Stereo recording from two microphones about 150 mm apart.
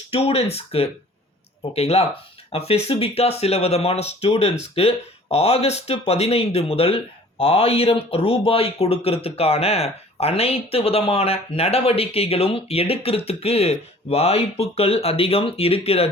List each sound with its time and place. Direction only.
0.1 s speech: 40° left (ahead or behind)